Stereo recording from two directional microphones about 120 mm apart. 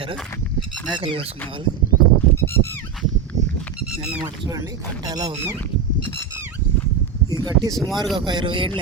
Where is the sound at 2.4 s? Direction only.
20° left (ahead or behind).